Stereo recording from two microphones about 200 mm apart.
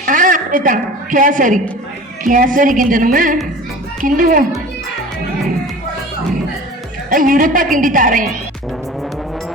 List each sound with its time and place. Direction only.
0.0 s a woman's voice: 40° right (ahead or behind)
7.1 s a woman's voice: 45° right (ahead or behind)